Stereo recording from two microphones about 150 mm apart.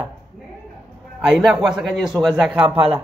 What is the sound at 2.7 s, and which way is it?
Speech, 40° right (ahead or behind).